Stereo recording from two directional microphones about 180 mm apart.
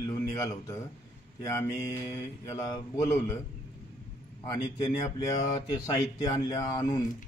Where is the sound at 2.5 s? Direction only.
20° left (ahead or behind).